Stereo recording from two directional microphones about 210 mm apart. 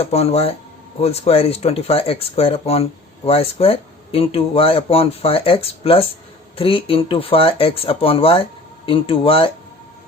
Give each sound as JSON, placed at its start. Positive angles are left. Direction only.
{"t": 0.0, "sound": "speech", "side_deg": 30}